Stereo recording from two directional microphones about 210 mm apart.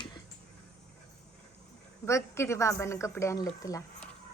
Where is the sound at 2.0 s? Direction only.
15° left (ahead or behind).